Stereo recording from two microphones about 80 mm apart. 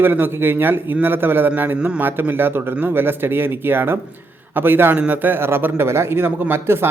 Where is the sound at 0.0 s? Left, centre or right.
Right.